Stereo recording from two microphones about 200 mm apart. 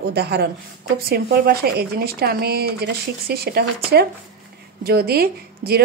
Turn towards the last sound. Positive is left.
turn(degrees=-50)  # may be behind; listen again after turning